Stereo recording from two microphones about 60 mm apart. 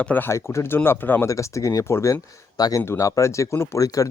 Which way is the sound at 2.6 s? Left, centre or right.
Left.